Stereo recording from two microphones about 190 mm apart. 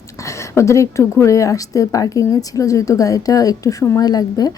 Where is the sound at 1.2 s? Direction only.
15° left (ahead or behind).